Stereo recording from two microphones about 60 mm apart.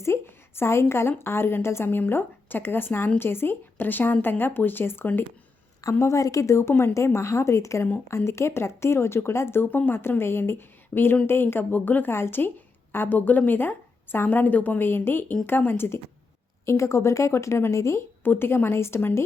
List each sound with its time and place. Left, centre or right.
0.0 s a woman's voice: left
6.0 s a woman's voice: left
16.6 s a woman's voice: left
18.2 s a woman's voice: left